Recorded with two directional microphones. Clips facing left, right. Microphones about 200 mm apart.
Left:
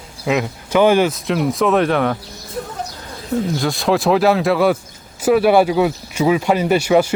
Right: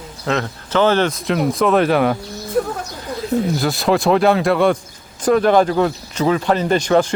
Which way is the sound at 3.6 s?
5° right (ahead or behind).